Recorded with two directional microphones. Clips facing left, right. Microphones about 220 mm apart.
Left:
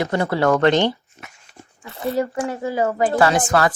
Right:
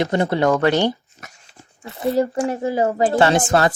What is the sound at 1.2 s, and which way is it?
Dog, 40° right (ahead or behind).